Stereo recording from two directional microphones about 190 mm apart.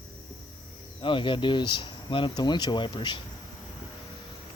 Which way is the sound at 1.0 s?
25° left (ahead or behind).